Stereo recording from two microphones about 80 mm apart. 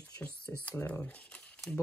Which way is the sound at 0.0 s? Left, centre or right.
Centre.